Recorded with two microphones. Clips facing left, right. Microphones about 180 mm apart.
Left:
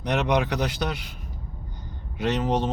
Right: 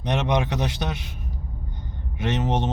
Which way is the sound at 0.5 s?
25° right (ahead or behind).